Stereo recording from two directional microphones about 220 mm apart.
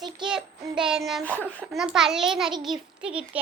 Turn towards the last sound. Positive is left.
turn(degrees=-5)  # may be behind; listen again after turning